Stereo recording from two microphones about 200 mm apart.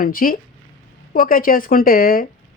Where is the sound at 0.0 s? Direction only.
45° left (ahead or behind).